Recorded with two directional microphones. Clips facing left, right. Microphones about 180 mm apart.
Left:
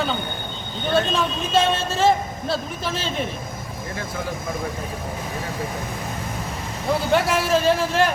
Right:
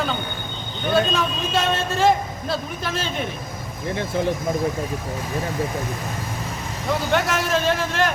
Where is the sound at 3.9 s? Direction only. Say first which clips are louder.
Right 7 dB; 25° right (ahead or behind).